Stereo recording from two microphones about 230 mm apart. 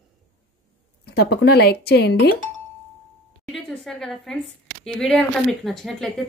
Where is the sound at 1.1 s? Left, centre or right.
Left.